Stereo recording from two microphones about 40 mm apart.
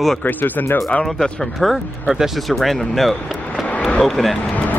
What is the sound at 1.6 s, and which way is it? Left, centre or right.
Speech, centre.